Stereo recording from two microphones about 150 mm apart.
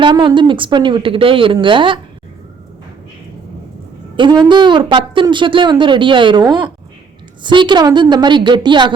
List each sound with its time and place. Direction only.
0.0 s a woman's voice: 30° right (ahead or behind)
4.2 s a woman's voice: 30° right (ahead or behind)